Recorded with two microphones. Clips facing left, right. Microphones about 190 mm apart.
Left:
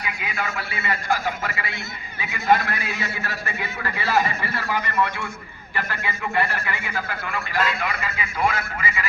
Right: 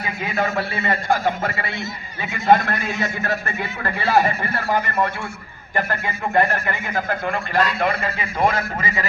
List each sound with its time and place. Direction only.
0.0 s a man's voice: 40° right (ahead or behind)
8.0 s a man's voice: 35° right (ahead or behind)